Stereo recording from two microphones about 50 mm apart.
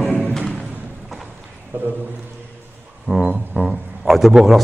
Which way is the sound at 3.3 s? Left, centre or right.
Centre.